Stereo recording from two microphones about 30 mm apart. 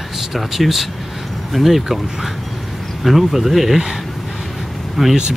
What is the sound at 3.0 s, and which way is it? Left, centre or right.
Speech, centre.